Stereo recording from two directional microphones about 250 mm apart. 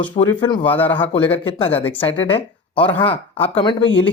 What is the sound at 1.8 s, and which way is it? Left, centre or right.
Speech, centre.